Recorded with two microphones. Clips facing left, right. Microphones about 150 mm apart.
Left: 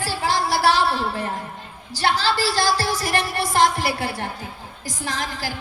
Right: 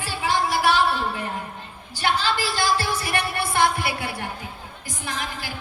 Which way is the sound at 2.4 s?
90° left.